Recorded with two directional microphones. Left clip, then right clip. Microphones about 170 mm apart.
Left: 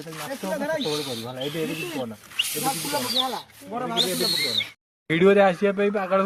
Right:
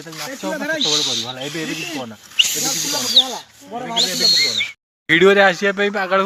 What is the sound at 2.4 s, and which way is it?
Speech, 70° left (ahead or behind).